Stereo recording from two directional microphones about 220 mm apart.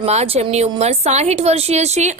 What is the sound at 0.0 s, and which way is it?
A woman's voice, 30° right (ahead or behind).